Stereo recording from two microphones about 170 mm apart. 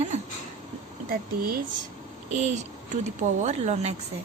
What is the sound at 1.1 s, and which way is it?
Speech, 60° right (ahead or behind).